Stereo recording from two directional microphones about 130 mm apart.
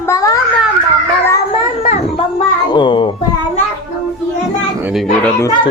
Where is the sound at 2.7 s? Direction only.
35° left (ahead or behind).